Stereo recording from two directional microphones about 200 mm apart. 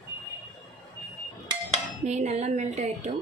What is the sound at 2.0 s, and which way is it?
Speech, 35° right (ahead or behind).